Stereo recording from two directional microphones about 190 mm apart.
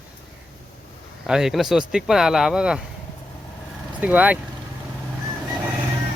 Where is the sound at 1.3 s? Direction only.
5° right (ahead or behind).